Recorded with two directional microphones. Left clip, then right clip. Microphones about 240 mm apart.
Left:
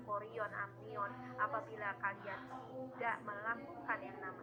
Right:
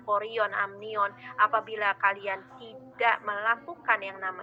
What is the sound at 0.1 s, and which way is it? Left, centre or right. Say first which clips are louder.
A woman's voice: right 15 dB; right.